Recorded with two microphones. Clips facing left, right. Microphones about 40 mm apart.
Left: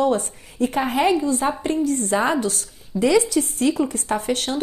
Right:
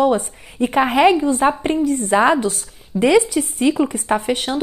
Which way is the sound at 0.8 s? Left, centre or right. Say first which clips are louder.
Right 6 dB; right.